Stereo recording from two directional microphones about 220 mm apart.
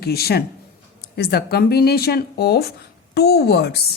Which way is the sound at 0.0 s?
45° left (ahead or behind).